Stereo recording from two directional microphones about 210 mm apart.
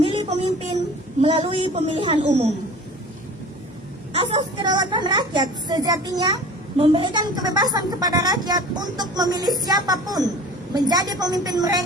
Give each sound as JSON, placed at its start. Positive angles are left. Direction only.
{"t": 0.0, "sound": "a sound", "side_deg": -25}
{"t": 1.2, "sound": "a woman's voice", "side_deg": -25}
{"t": 4.1, "sound": "a woman's voice", "side_deg": -30}